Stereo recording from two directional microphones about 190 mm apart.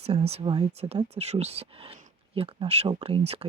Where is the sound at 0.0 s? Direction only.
30° right (ahead or behind).